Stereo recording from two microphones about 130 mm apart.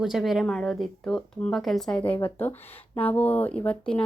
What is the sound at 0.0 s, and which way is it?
Speech, centre (ahead or behind).